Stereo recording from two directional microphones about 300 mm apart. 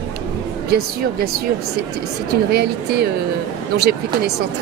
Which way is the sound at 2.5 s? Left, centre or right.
Right.